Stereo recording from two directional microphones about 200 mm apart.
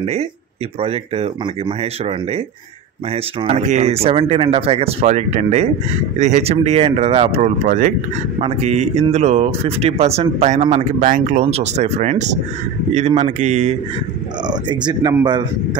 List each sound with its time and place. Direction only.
0.0 s speech: 35° right (ahead or behind)
14.5 s speech: 20° right (ahead or behind)